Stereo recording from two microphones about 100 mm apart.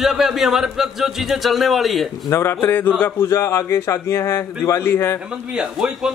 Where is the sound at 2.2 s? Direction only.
25° left (ahead or behind).